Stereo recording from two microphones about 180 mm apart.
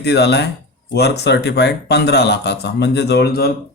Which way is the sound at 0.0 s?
70° left (ahead or behind).